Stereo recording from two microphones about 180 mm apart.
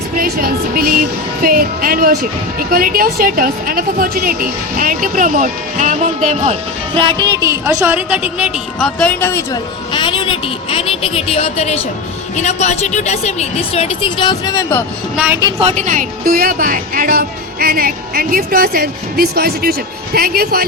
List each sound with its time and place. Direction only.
0.2 s a woman's voice: 55° right (ahead or behind); by 9.6 s 15° left (ahead or behind)
9.9 s a woman's voice: 25° left (ahead or behind)
15.1 s a woman's voice: 10° right (ahead or behind)
15.4 s a woman's voice: 20° right (ahead or behind)
15.6 s a woman's voice: 40° right (ahead or behind); by 20.7 s 60° right (ahead or behind)